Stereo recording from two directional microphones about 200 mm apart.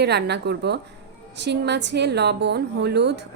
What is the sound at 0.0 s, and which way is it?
A woman's voice, 55° right (ahead or behind).